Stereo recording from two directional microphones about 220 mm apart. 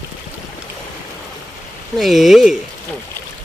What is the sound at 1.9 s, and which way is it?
Speech, centre (ahead or behind).